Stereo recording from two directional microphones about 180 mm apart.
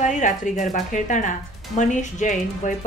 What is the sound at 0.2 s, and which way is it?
Speech, 45° left (ahead or behind).